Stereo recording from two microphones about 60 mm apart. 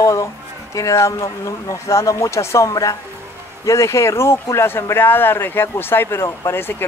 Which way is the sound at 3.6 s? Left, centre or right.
Left.